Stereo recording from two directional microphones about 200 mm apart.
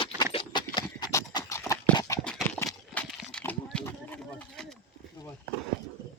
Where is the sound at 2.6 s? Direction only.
15° left (ahead or behind).